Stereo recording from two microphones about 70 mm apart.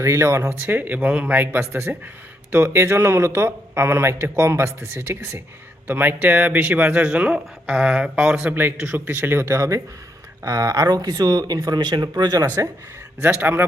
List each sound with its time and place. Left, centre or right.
0.0 s speech: right
0.6 s speech: right; by 8.5 s centre
8.8 s speech: right
13.2 s speech: right